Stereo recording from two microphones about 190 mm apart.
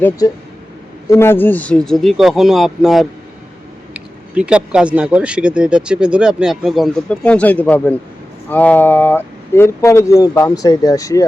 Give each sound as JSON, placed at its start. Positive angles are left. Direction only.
{"t": 1.0, "sound": "speech", "side_deg": 15}